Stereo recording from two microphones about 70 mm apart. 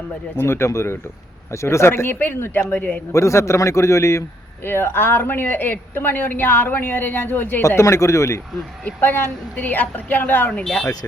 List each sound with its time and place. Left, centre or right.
0.3 s speech: left
3.1 s a man's voice: left
4.6 s speech: left
7.8 s a man's voice: left
8.8 s speech: left
10.6 s speech: centre